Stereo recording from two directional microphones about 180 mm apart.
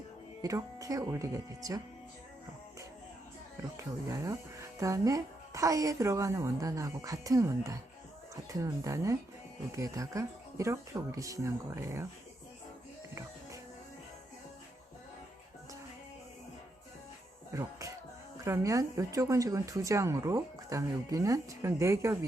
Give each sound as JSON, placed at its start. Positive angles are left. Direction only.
{"t": 0.4, "sound": "speech", "side_deg": -20}
{"t": 4.1, "sound": "speech", "side_deg": -15}
{"t": 17.5, "sound": "speech", "side_deg": -15}